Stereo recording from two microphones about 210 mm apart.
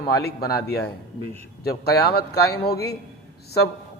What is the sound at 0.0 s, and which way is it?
Speech, 50° left (ahead or behind).